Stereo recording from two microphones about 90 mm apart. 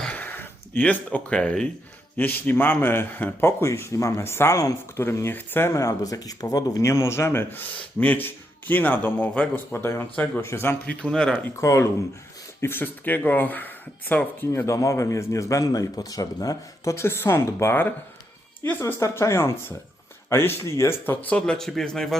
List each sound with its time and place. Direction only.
0.0 s a sound: 15° left (ahead or behind)
2.1 s speech: 20° left (ahead or behind)
5.7 s speech: 40° left (ahead or behind)
6.8 s speech: 30° left (ahead or behind)
9.7 s speech: 30° left (ahead or behind)
10.8 s speech: 10° left (ahead or behind)
11.5 s speech: 35° left (ahead or behind)
14.5 s speech: 35° left (ahead or behind)
21.2 s speech: 15° left (ahead or behind)